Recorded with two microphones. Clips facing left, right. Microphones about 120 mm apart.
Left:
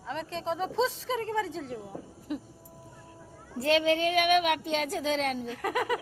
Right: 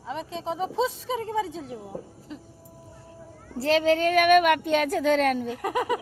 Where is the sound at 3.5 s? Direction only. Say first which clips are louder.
Right 3 dB; 35° right (ahead or behind); by 5.5 s 60° right (ahead or behind).